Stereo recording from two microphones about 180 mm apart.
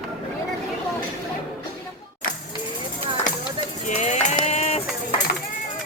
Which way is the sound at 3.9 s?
40° left (ahead or behind).